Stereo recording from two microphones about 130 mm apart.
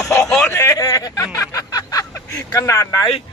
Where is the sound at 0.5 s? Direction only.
20° left (ahead or behind).